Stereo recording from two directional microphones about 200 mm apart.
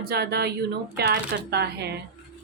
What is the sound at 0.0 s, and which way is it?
Speech, 50° right (ahead or behind).